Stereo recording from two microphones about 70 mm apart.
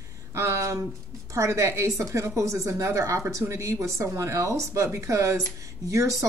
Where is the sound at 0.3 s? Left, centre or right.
Right.